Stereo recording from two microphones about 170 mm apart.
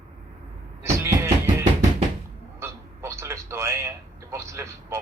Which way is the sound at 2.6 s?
15° right (ahead or behind).